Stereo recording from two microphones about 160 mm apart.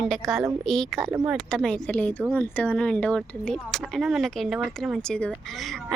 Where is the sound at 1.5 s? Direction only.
5° left (ahead or behind).